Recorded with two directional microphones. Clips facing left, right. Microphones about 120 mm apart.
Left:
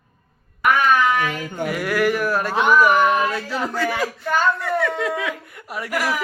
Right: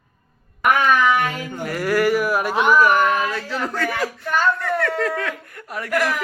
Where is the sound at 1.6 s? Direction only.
Centre (ahead or behind).